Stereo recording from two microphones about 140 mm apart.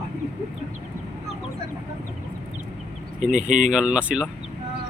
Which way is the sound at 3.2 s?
65° right (ahead or behind).